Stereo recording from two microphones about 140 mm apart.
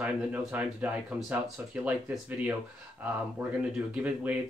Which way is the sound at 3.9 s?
10° right (ahead or behind).